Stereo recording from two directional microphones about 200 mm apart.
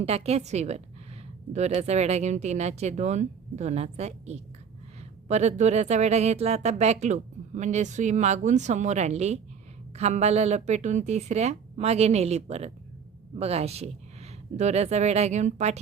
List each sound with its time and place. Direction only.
0.0 s speech: 30° right (ahead or behind)